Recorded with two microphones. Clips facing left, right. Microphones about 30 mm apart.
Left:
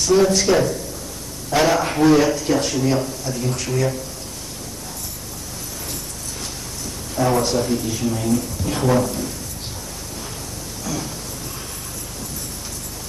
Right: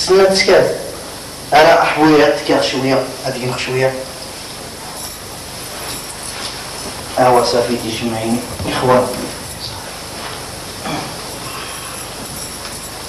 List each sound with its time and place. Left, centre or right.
0.0 s speech: right
7.2 s speech: right
10.8 s a sound: right